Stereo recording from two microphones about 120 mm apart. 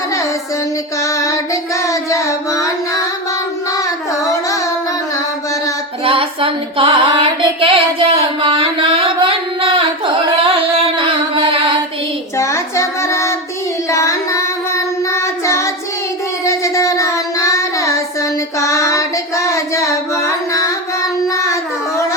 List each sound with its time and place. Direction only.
1.0 s child singing: 25° left (ahead or behind)
3.8 s carnatic music: 25° left (ahead or behind)
6.1 s female singing: 50° right (ahead or behind)
12.4 s child singing: 25° left (ahead or behind)
21.4 s a sound: 25° left (ahead or behind)